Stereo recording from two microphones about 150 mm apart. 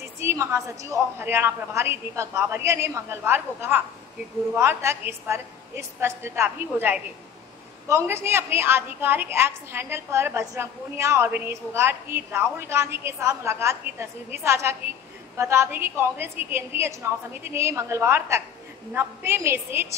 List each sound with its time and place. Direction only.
0.2 s a woman's voice: 15° right (ahead or behind)